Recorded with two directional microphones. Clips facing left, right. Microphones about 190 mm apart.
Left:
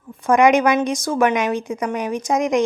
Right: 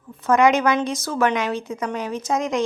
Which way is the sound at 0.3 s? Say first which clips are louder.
Left 3 dB; 15° left (ahead or behind).